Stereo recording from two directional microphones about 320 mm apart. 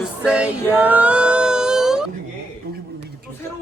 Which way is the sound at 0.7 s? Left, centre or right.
Centre.